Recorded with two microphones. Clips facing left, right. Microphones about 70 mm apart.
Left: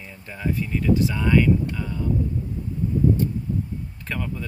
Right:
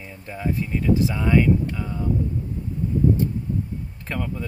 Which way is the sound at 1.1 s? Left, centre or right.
Centre.